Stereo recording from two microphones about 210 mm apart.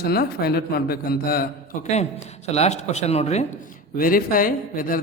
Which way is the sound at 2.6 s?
30° left (ahead or behind).